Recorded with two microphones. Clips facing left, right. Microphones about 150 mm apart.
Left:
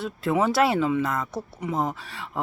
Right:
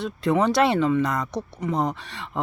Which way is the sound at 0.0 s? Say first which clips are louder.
Right 2 dB; 5° left (ahead or behind).